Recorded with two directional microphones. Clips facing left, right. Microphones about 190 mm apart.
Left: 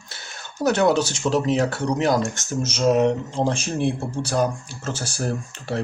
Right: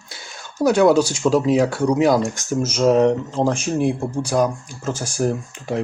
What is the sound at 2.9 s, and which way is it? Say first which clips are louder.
Speech: right 3 dB; 35° right (ahead or behind).